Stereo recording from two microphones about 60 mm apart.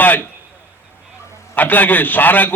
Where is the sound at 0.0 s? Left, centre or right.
Left.